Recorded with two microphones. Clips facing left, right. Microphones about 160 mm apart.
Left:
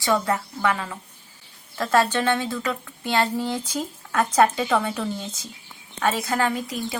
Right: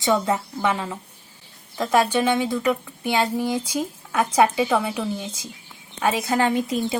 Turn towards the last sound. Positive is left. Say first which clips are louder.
# right 4 dB
turn(degrees=-20)  # may be behind; listen again after turning